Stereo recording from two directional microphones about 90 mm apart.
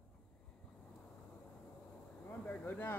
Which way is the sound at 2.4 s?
20° left (ahead or behind).